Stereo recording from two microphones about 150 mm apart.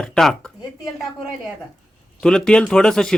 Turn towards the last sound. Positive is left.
turn(degrees=5)  # may be behind; listen again after turning